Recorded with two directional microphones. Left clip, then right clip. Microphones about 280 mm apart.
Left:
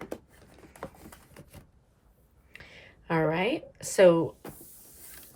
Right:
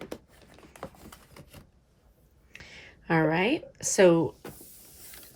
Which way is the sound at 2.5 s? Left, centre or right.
Centre.